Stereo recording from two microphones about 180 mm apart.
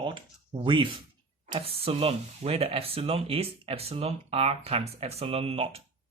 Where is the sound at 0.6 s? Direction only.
30° right (ahead or behind).